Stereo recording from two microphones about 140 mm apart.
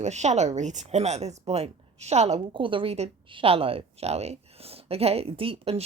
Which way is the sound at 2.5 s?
35° right (ahead or behind).